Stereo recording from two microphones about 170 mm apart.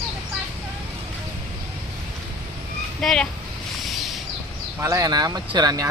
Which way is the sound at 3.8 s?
Centre (ahead or behind).